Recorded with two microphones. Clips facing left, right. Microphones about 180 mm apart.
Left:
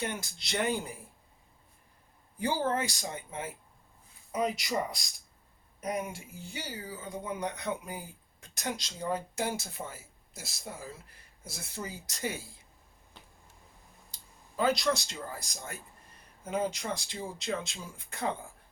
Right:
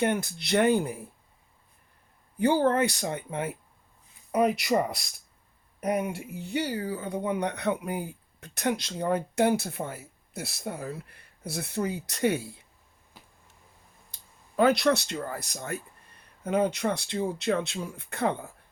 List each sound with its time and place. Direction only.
0.0 s speech: 60° right (ahead or behind)
2.4 s speech: 60° right (ahead or behind)
14.1 s speech: 60° right (ahead or behind)